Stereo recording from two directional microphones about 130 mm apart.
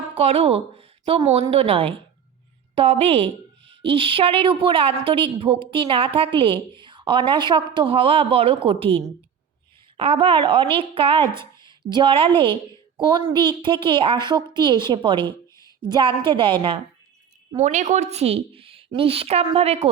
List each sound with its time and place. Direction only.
0.2 s a woman's voice: 50° right (ahead or behind)
17.6 s a woman's voice: 65° right (ahead or behind)